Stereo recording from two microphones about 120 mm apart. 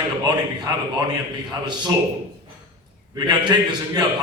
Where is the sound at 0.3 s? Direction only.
35° right (ahead or behind).